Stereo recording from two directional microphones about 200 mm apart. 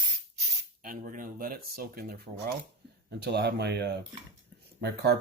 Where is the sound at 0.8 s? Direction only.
45° right (ahead or behind).